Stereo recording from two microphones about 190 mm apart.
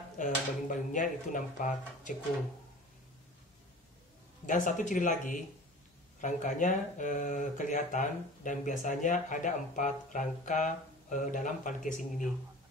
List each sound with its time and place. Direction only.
0.2 s speech: 45° left (ahead or behind)
4.5 s speech: 40° left (ahead or behind)